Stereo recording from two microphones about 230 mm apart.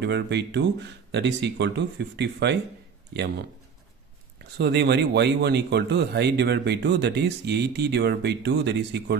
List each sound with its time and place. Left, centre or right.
0.0 s a man's voice: right
4.6 s speech: right